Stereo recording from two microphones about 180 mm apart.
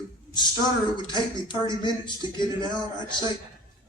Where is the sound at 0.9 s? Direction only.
25° left (ahead or behind).